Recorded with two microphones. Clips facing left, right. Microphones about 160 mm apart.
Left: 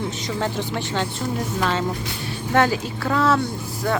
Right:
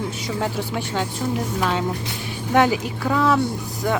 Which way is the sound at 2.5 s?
15° right (ahead or behind).